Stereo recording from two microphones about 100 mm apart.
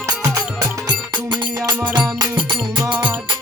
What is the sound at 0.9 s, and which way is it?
Music, 50° right (ahead or behind).